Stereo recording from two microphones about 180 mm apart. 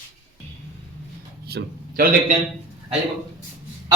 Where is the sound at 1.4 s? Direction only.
60° right (ahead or behind).